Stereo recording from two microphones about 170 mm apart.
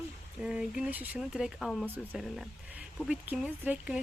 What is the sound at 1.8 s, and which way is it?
Speech, 10° right (ahead or behind).